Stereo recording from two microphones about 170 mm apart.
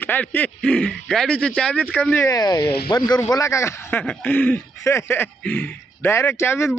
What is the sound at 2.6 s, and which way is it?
Speech, 65° left (ahead or behind).